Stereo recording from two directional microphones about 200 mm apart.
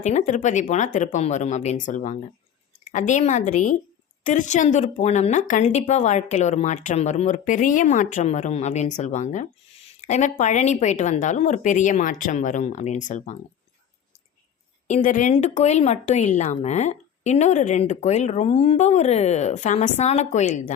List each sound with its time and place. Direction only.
0.0 s a woman's voice: 35° left (ahead or behind)
14.8 s a woman's voice: 40° left (ahead or behind)